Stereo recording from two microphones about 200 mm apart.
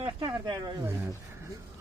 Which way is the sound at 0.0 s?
25° right (ahead or behind).